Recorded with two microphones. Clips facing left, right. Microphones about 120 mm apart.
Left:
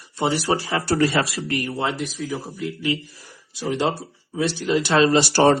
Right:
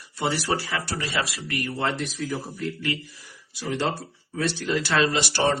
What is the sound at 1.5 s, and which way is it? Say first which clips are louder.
Speech: left 3 dB; 25° left (ahead or behind).